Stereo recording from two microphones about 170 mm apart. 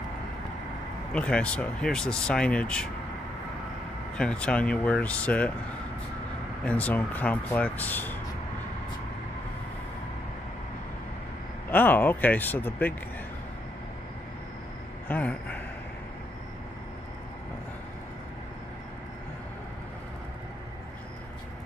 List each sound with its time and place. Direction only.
1.1 s speech: 5° left (ahead or behind)
4.2 s speech: 5° left (ahead or behind)
6.6 s speech: 10° left (ahead or behind)
11.7 s speech: 10° left (ahead or behind)
15.0 s speech: 10° left (ahead or behind)